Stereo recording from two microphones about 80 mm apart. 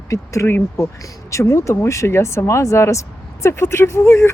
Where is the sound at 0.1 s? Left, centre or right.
Left.